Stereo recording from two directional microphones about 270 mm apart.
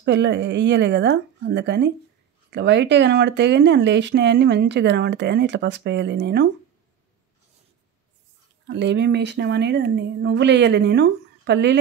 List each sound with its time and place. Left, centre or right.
0.0 s speech: right
8.6 s speech: right